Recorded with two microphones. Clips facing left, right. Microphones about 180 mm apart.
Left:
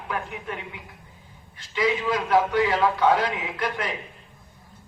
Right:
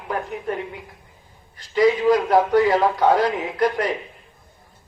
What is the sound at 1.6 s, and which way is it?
A man's voice, 40° right (ahead or behind).